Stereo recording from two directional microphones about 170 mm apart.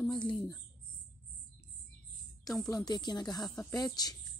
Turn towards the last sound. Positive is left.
turn(degrees=20)  # may be behind; listen again after turning